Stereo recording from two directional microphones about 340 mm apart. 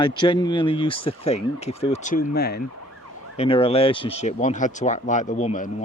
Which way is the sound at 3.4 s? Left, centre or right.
Centre.